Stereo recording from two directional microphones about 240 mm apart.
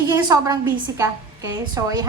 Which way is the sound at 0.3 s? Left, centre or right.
Centre.